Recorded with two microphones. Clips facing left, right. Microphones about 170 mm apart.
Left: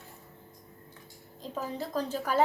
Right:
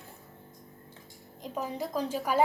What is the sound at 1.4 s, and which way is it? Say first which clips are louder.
Speech: right 1 dB; 15° right (ahead or behind).